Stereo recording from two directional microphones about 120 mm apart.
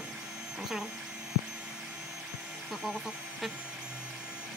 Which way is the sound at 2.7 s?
5° right (ahead or behind).